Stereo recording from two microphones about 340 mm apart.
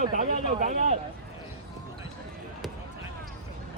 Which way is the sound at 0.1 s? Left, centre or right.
Right.